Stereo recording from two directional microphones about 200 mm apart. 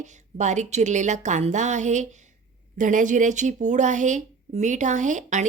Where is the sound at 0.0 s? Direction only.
35° right (ahead or behind).